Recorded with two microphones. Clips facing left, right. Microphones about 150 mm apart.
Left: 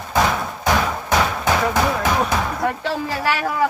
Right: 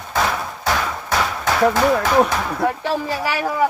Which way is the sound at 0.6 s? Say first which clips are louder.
Left 3 dB; 20° left (ahead or behind).